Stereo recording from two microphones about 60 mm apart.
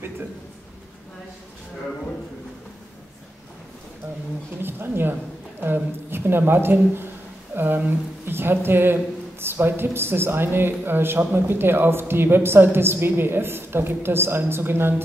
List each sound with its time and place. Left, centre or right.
4.6 s a man's voice: right